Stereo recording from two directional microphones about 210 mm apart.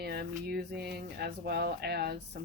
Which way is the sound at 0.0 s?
50° right (ahead or behind).